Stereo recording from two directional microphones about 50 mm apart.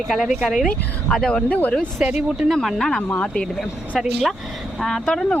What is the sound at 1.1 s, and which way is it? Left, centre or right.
Speech, centre.